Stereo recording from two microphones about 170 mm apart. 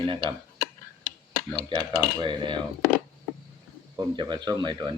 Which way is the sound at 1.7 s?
30° right (ahead or behind).